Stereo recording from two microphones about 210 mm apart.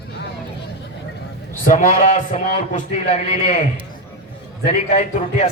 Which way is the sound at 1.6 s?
35° left (ahead or behind).